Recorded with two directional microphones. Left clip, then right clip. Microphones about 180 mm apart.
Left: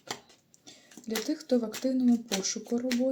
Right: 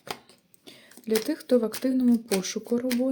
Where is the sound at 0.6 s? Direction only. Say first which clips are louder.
Right 4 dB; 55° right (ahead or behind).